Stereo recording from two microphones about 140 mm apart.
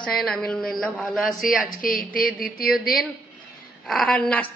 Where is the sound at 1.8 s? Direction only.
90° left.